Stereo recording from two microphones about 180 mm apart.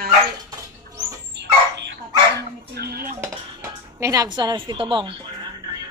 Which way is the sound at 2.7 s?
60° right (ahead or behind).